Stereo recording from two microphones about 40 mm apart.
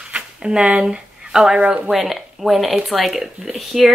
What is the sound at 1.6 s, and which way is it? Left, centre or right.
Speech, right.